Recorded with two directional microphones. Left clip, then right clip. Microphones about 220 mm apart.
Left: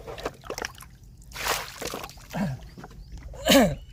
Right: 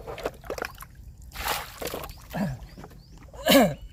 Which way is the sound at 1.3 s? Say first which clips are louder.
Left 2 dB; 25° left (ahead or behind).